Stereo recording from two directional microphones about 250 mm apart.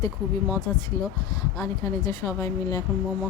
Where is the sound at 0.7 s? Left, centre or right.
Centre.